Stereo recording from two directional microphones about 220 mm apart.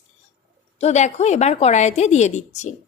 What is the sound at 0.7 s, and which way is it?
A woman's voice, 30° left (ahead or behind).